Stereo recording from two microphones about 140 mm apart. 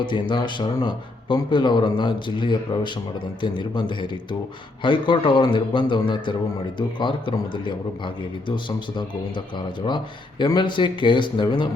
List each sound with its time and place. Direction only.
0.0 s a man's voice: 35° left (ahead or behind)